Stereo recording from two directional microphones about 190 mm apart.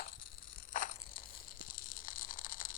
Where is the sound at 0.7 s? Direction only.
45° left (ahead or behind).